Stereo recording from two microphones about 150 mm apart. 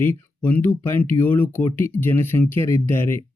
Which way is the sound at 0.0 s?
15° left (ahead or behind).